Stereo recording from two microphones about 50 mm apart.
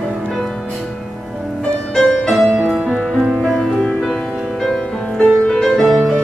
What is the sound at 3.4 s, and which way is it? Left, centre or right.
Music, centre.